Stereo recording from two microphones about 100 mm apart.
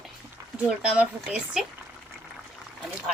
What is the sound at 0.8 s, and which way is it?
Speech, 10° right (ahead or behind).